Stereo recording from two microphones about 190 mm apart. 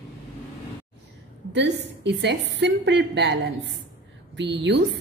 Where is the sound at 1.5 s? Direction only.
65° right (ahead or behind).